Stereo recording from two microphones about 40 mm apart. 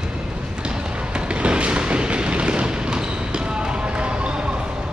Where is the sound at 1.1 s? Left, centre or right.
Right.